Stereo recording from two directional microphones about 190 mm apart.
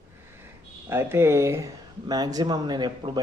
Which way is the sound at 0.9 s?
10° right (ahead or behind).